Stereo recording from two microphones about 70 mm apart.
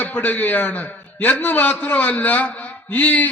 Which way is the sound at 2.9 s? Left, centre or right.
Left.